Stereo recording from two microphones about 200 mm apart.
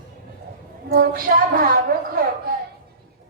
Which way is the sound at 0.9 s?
50° right (ahead or behind).